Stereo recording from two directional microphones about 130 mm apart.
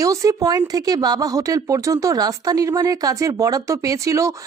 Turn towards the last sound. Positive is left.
turn(degrees=-25)  # may be behind; listen again after turning